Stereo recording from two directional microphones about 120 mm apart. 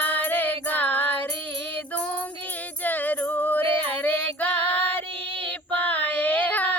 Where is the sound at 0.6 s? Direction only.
15° left (ahead or behind).